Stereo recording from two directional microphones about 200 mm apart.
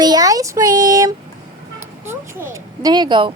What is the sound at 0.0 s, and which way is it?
Speech, 20° right (ahead or behind).